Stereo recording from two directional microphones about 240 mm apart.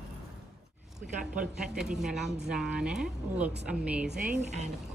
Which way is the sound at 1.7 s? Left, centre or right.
Centre.